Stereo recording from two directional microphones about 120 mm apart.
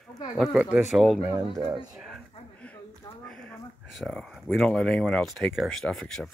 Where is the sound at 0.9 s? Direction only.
Centre (ahead or behind).